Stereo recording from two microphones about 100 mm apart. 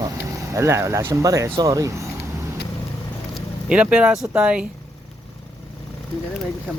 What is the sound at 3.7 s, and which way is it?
Speech, 10° right (ahead or behind).